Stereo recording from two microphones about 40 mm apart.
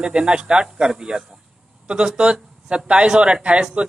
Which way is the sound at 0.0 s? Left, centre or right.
Right.